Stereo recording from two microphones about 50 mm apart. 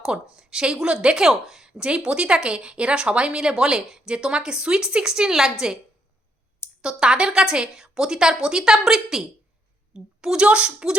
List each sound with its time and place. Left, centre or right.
0.0 s speech: centre
6.8 s speech: centre
9.9 s a sound: centre
10.4 s a woman's voice: right